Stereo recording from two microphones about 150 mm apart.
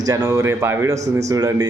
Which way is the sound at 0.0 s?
25° right (ahead or behind).